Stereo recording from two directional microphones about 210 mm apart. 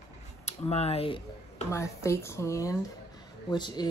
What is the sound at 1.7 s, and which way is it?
Speech, 15° left (ahead or behind).